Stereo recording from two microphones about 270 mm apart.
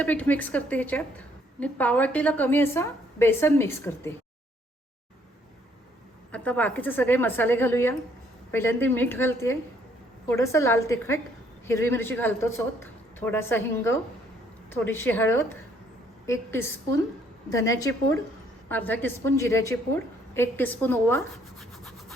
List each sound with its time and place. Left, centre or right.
0.0 s a woman's voice: centre
6.3 s a woman's voice: centre
20.3 s rub: centre